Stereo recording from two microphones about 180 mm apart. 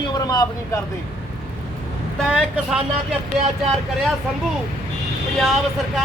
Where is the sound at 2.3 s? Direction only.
5° right (ahead or behind).